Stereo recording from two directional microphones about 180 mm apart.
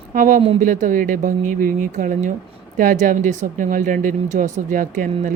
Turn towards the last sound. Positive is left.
turn(degrees=-45)  # may be behind; listen again after turning